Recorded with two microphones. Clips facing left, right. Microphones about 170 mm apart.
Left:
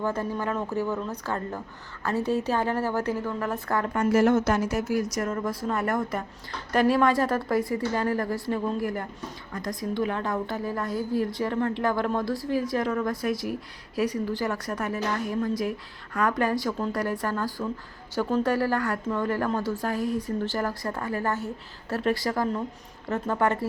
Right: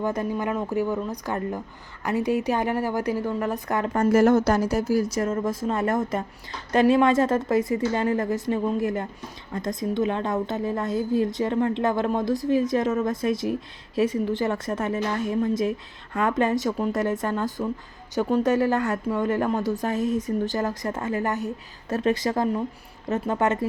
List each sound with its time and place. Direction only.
0.0 s a woman's voice: 15° right (ahead or behind)
3.9 s a woman's voice: 45° right (ahead or behind); by 23.6 s 20° right (ahead or behind)